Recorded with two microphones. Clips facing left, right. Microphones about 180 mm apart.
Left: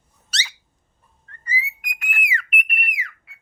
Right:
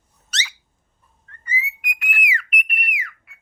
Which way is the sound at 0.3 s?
35° left (ahead or behind).